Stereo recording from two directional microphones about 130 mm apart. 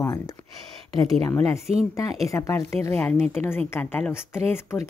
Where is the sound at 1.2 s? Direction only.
25° left (ahead or behind).